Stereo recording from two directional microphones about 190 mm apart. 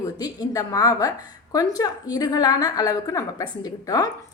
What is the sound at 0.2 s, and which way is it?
A woman's voice, 20° left (ahead or behind).